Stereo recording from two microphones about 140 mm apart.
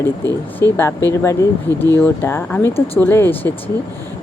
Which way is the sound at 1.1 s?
20° left (ahead or behind).